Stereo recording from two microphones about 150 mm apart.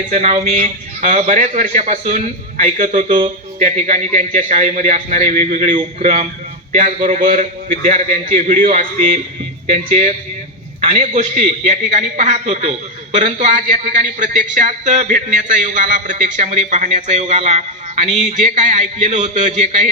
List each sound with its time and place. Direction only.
0.1 s a man's voice: 50° right (ahead or behind)